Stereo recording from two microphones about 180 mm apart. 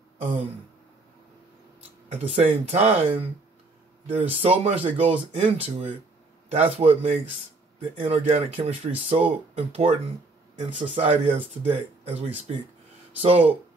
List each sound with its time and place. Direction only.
2.2 s speech: 35° right (ahead or behind)